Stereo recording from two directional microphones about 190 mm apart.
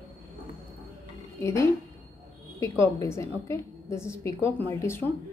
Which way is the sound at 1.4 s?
15° left (ahead or behind).